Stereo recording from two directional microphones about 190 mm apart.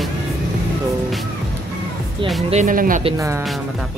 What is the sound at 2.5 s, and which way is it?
Speech, 45° right (ahead or behind).